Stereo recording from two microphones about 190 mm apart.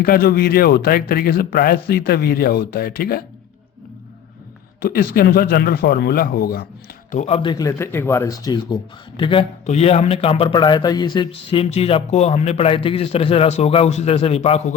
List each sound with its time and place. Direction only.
0.0 s speech: 55° left (ahead or behind)
4.8 s speech: 55° left (ahead or behind)
7.1 s speech: 35° left (ahead or behind)